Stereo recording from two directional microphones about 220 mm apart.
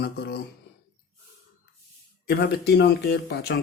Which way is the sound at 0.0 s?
45° left (ahead or behind).